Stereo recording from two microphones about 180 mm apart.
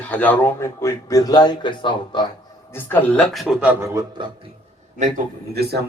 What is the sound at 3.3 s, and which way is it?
Speech, centre (ahead or behind).